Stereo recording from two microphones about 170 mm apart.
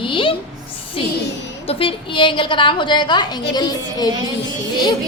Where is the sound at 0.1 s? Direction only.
30° left (ahead or behind).